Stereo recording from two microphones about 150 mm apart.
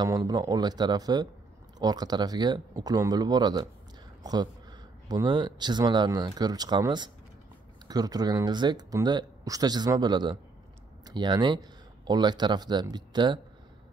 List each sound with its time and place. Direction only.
0.0 s speech: 25° right (ahead or behind)